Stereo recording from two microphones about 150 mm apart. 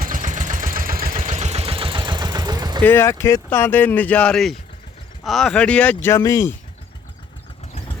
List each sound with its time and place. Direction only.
0.0 s vehicle: 60° right (ahead or behind)
1.3 s vehicle: 50° right (ahead or behind); by 2.8 s 25° right (ahead or behind)
2.8 s speech: 15° left (ahead or behind)